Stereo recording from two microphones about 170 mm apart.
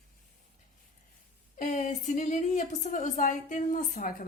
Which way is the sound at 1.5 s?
55° left (ahead or behind).